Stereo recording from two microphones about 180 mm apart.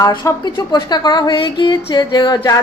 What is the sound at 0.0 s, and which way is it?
A woman's voice, 25° left (ahead or behind).